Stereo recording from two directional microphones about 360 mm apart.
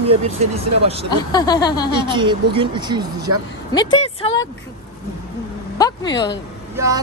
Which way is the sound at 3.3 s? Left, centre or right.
Right.